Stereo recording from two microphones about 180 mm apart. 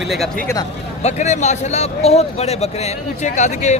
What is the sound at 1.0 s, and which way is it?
Speech, 40° left (ahead or behind).